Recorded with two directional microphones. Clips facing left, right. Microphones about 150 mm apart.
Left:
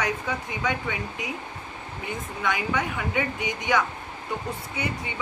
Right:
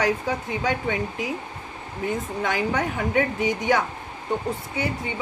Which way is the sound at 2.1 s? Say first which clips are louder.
Right 3 dB; 45° right (ahead or behind).